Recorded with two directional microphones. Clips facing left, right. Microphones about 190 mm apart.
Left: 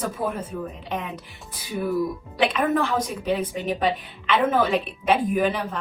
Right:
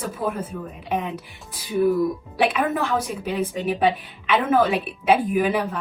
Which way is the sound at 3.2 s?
10° right (ahead or behind).